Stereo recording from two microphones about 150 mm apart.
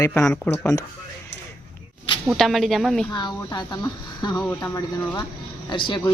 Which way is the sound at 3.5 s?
30° left (ahead or behind).